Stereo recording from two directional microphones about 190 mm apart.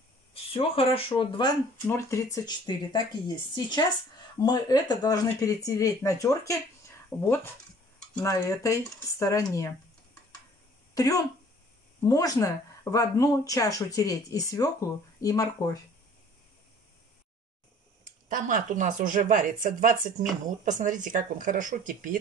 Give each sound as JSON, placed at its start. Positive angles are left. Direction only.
{"t": 0.3, "sound": "speech", "side_deg": 30}
{"t": 1.9, "sound": "speech", "side_deg": 15}
{"t": 11.0, "sound": "speech", "side_deg": 20}
{"t": 18.0, "sound": "speech", "side_deg": -45}